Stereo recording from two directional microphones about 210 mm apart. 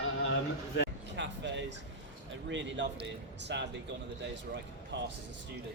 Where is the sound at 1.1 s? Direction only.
60° right (ahead or behind).